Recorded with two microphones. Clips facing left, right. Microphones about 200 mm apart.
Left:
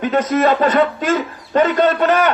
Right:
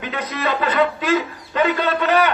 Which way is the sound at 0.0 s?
45° left (ahead or behind).